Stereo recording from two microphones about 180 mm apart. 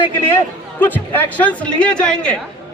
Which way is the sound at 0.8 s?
10° left (ahead or behind).